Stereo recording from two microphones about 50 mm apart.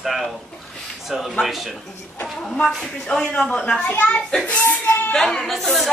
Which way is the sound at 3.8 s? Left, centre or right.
Left.